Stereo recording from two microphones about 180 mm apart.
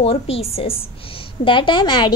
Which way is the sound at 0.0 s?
35° left (ahead or behind).